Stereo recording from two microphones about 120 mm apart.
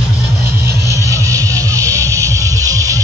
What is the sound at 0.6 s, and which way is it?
Music, 25° right (ahead or behind).